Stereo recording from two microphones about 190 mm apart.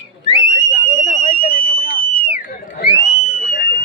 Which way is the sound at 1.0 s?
40° left (ahead or behind).